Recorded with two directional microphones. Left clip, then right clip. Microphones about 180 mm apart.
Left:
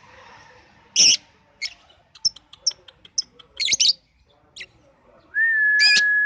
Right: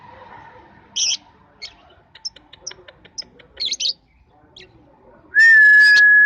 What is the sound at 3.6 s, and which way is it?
Chirp, 35° left (ahead or behind).